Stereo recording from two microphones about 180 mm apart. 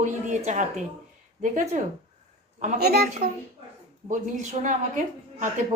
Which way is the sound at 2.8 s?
60° right (ahead or behind).